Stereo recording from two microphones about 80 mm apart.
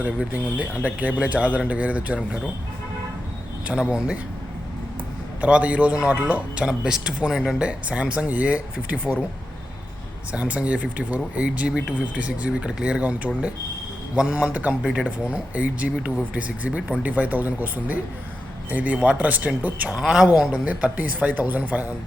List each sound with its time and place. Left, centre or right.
0.0 s speech: centre
3.7 s speech: centre
5.4 s speech: centre
10.3 s speech: centre